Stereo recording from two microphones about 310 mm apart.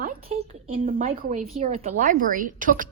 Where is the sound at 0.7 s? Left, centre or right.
Right.